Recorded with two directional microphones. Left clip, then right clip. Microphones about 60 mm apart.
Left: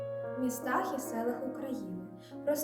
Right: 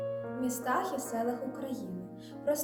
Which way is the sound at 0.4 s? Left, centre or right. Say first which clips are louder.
Right 1 dB; centre.